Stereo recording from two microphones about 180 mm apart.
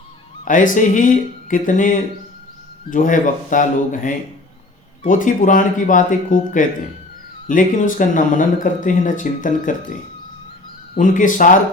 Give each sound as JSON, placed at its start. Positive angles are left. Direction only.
{"t": 0.4, "sound": "speech", "side_deg": 45}
{"t": 10.9, "sound": "speech", "side_deg": 45}